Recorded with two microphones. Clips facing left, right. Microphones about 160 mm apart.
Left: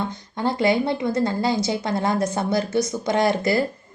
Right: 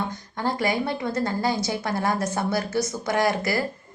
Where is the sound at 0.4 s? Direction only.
20° left (ahead or behind).